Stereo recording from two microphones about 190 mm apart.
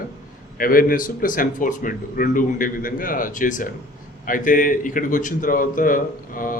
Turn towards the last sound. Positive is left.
turn(degrees=45)  # may be behind; listen again after turning